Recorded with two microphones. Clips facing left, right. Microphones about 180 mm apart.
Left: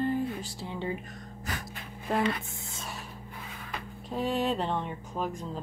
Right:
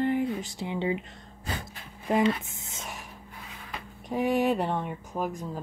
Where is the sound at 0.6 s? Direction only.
15° right (ahead or behind).